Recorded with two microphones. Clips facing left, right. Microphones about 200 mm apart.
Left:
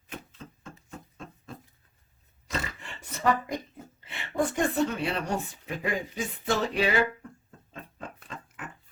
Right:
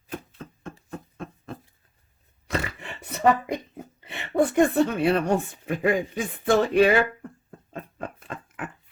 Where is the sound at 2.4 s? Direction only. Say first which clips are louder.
Right 5 dB; 60° right (ahead or behind).